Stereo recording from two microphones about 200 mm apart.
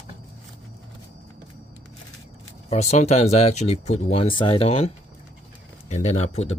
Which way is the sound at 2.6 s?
35° left (ahead or behind).